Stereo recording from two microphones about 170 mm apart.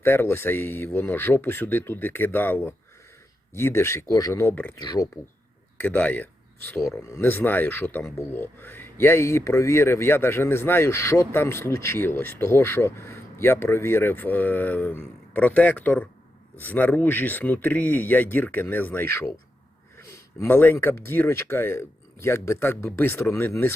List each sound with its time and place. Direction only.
0.0 s speech: 15° left (ahead or behind)
4.8 s speech: 20° left (ahead or behind)
5.8 s speech: 10° left (ahead or behind)